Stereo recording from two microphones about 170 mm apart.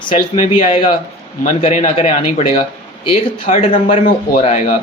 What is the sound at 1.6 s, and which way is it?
A man's voice, 40° left (ahead or behind).